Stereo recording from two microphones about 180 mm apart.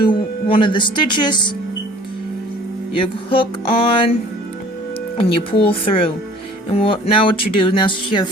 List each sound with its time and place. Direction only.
0.1 s speech: 25° left (ahead or behind)
2.9 s speech: 30° left (ahead or behind)
5.1 s speech: 30° left (ahead or behind)